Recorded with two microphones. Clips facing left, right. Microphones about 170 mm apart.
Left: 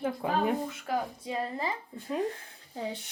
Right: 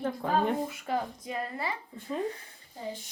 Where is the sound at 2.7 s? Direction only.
75° left (ahead or behind).